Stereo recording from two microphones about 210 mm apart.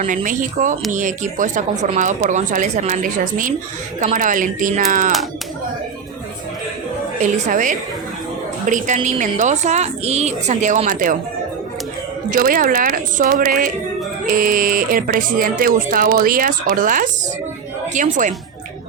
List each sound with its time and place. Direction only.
0.0 s speech: 40° right (ahead or behind)
7.2 s speech: 35° right (ahead or behind)
12.3 s speech: 40° right (ahead or behind)